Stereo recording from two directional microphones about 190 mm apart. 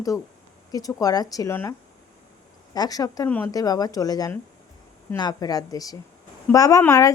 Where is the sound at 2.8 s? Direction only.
20° left (ahead or behind).